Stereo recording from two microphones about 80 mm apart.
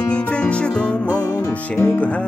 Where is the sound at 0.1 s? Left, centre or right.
Centre.